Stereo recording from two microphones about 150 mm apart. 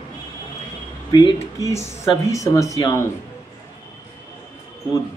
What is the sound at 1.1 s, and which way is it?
Speech, 25° left (ahead or behind).